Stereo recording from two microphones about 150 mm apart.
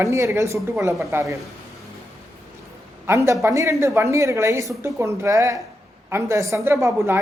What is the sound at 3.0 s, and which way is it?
A man's voice, 20° right (ahead or behind).